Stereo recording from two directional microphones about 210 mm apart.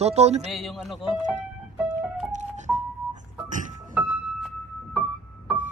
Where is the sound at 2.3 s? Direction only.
35° right (ahead or behind).